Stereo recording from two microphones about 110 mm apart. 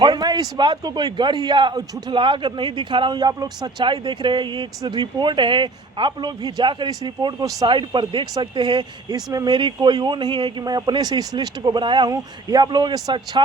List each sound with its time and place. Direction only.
0.0 s a man's voice: 40° right (ahead or behind)